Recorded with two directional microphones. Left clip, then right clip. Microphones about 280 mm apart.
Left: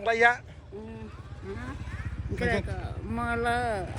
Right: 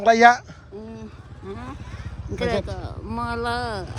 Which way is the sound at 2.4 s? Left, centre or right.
Centre.